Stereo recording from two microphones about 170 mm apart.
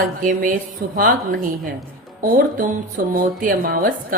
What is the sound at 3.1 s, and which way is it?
Speech, 55° right (ahead or behind).